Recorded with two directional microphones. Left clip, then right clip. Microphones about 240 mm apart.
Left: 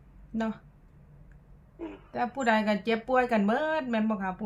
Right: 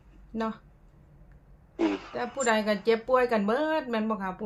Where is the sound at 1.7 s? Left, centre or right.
Right.